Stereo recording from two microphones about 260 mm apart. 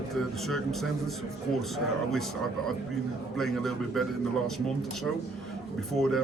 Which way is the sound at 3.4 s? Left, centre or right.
Centre.